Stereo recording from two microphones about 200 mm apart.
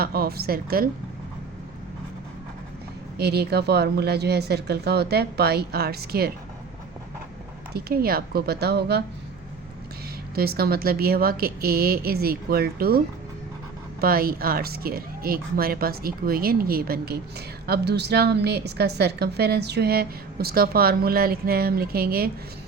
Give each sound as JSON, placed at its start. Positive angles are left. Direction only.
{"t": 0.0, "sound": "speech", "side_deg": -50}
{"t": 3.2, "sound": "speech", "side_deg": -55}
{"t": 7.7, "sound": "speech", "side_deg": -50}
{"t": 10.3, "sound": "speech", "side_deg": -50}
{"t": 14.0, "sound": "speech", "side_deg": -50}